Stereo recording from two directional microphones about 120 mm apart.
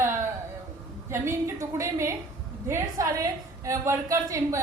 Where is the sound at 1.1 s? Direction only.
20° right (ahead or behind).